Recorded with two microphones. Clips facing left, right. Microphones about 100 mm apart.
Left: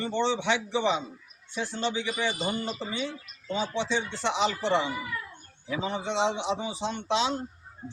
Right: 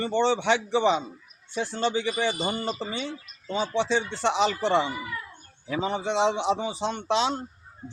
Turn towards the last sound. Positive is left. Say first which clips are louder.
# right 2 dB
turn(degrees=-45)  # may be behind; listen again after turning